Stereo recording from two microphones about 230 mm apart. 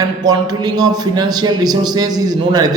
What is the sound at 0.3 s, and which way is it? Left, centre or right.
A man's voice, centre.